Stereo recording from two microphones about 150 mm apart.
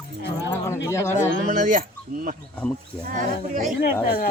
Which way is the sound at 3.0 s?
65° right (ahead or behind).